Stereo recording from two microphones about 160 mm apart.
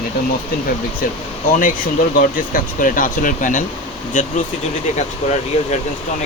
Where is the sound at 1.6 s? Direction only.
55° left (ahead or behind).